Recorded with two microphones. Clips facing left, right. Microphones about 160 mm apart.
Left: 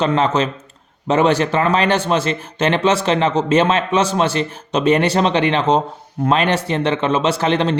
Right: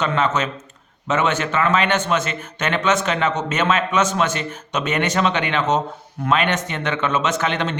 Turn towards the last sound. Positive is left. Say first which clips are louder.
# left 5 dB
turn(degrees=35)  # may be behind; listen again after turning